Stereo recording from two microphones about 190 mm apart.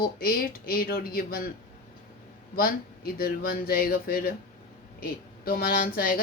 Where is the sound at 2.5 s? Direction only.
50° left (ahead or behind).